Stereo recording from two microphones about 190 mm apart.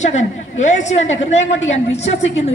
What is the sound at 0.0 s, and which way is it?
A woman's voice, 40° left (ahead or behind).